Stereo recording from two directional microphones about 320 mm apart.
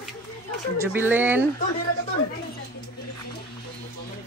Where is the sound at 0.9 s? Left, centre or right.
Centre.